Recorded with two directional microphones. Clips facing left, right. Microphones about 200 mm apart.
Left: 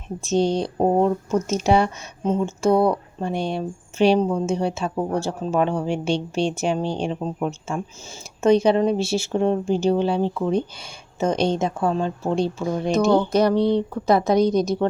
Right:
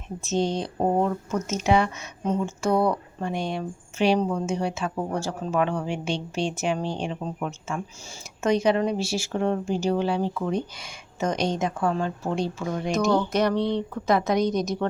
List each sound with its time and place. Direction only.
0.3 s speech: 35° left (ahead or behind)